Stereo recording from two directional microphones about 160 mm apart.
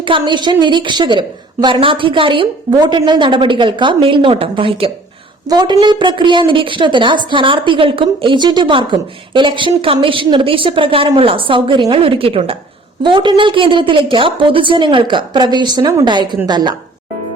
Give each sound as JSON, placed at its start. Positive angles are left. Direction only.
{"t": 0.0, "sound": "a woman's voice", "side_deg": -30}